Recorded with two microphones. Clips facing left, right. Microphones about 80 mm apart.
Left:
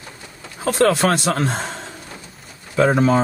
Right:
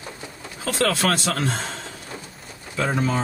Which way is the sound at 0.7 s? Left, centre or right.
Left.